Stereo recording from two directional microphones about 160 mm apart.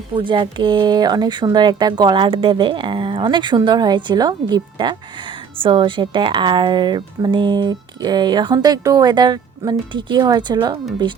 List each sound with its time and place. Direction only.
0.2 s speech: 30° right (ahead or behind)